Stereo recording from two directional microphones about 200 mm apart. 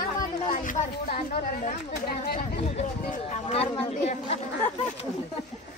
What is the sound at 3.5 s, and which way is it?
Speech, 30° left (ahead or behind).